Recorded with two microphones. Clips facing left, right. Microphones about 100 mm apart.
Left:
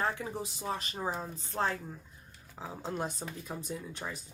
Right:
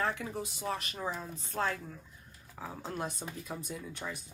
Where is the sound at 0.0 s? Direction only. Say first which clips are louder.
Even; 30° left (ahead or behind).